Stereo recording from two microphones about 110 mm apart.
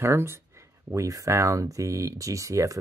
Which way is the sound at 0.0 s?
25° right (ahead or behind).